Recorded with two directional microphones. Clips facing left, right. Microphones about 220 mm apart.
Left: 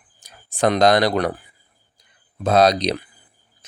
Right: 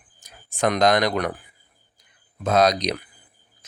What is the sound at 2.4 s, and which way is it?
Speech, 30° left (ahead or behind).